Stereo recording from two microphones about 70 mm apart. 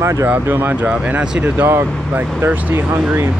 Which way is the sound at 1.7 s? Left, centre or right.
Right.